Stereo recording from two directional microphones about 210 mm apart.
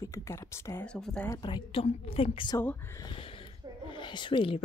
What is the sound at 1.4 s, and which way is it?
A woman's voice, 25° left (ahead or behind).